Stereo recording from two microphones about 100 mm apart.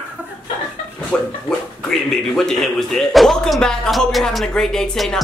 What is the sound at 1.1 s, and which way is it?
Speech, 10° left (ahead or behind).